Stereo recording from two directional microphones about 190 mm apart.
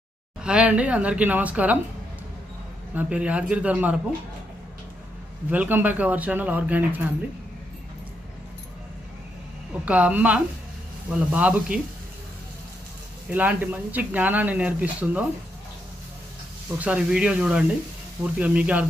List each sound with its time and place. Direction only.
0.4 s speech: 5° right (ahead or behind)
2.9 s speech: 10° right (ahead or behind)
5.5 s speech: 10° right (ahead or behind)
9.8 s speech: 5° right (ahead or behind)
13.3 s speech: 10° right (ahead or behind)
16.7 s speech: 5° right (ahead or behind)